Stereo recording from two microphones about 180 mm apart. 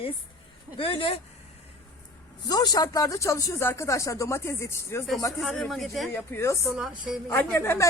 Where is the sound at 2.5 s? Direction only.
20° left (ahead or behind).